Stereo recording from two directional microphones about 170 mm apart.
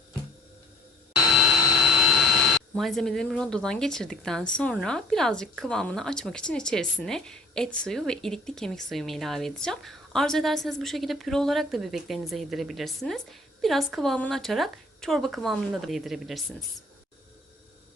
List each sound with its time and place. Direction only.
1.4 s speech: centre (ahead or behind)